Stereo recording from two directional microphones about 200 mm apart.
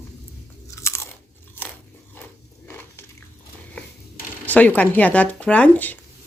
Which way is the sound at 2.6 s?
10° left (ahead or behind).